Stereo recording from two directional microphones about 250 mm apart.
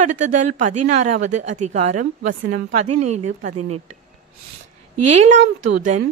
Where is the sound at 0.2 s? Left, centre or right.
Right.